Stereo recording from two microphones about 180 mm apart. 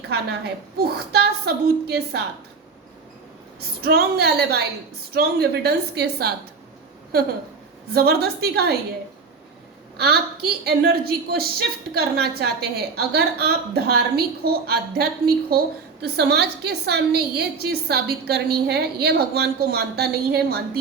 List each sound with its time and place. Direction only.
0.1 s a woman's voice: 65° right (ahead or behind)
3.6 s a woman's voice: 60° right (ahead or behind)
10.0 s a woman's voice: 60° right (ahead or behind)